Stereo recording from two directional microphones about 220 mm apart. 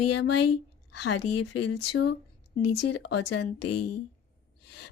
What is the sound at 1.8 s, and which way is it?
Speech, 50° left (ahead or behind).